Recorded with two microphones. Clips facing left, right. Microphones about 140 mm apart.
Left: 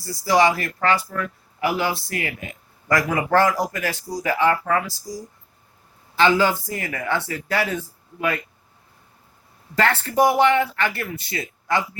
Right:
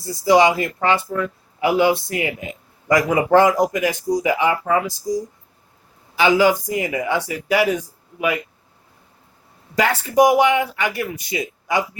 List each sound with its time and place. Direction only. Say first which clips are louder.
0.0 s speech: right 4 dB; 20° right (ahead or behind)
9.7 s speech: right 3 dB; 10° right (ahead or behind)